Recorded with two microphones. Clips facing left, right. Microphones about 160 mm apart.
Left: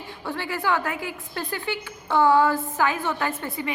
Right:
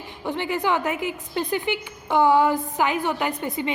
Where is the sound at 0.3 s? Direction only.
20° right (ahead or behind).